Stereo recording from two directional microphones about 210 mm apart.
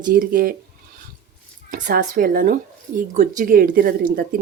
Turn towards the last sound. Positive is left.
turn(degrees=-45)  # may be behind; listen again after turning